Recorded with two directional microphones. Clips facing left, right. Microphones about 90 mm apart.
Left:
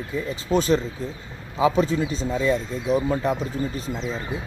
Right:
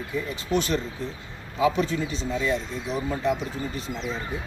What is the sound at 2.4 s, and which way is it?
Speech, 40° left (ahead or behind).